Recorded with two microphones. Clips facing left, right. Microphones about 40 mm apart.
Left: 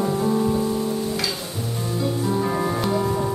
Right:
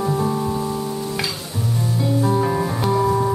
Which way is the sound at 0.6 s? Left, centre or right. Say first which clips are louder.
Left 1 dB; right.